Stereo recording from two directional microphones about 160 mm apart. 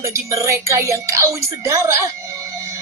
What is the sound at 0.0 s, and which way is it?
Speech, 20° right (ahead or behind).